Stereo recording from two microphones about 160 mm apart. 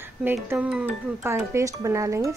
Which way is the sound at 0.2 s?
15° right (ahead or behind).